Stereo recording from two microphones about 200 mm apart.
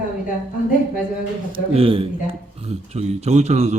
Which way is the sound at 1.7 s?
25° right (ahead or behind).